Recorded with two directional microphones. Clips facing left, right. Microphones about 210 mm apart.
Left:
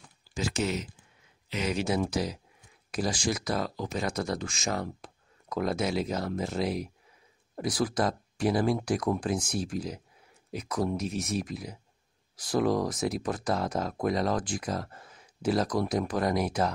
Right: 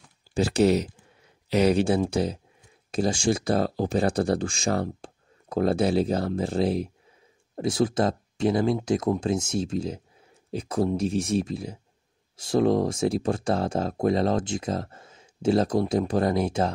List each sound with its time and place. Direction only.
0.3 s speech: 35° right (ahead or behind)